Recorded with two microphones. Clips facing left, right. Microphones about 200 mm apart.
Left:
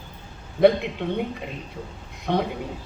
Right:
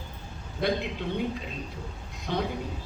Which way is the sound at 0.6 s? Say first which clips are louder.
Left 10 dB; 60° left (ahead or behind).